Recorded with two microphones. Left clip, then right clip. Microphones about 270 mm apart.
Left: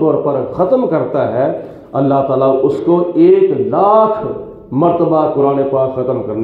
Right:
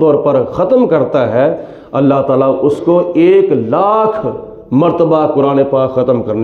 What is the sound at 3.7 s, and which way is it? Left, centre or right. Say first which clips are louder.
Speech: left 1 dB; right.